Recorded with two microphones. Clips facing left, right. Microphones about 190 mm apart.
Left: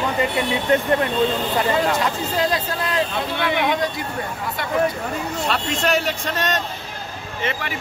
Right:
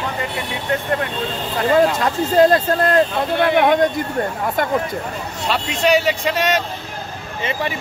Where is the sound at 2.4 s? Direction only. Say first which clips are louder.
Right 11 dB; 50° right (ahead or behind).